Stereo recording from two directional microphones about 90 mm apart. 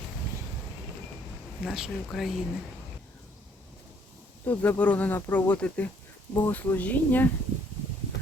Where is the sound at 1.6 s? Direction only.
5° right (ahead or behind).